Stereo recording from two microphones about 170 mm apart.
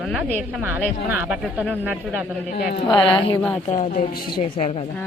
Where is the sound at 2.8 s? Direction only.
30° left (ahead or behind).